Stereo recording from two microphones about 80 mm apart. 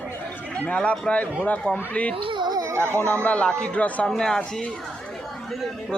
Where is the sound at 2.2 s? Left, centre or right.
Right.